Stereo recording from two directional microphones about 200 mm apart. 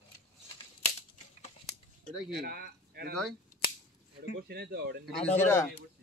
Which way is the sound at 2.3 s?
50° right (ahead or behind).